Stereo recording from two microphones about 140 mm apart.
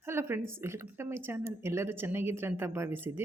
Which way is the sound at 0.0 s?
20° right (ahead or behind).